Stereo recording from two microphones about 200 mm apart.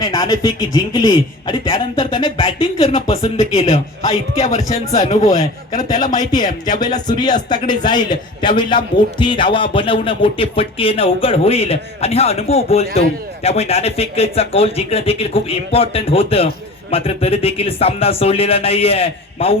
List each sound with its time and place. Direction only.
0.0 s a man's voice: 20° left (ahead or behind); by 4.8 s 35° left (ahead or behind)
5.2 s a man's voice: 20° left (ahead or behind)